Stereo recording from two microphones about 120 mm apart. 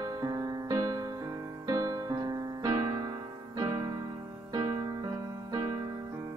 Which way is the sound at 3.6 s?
35° right (ahead or behind).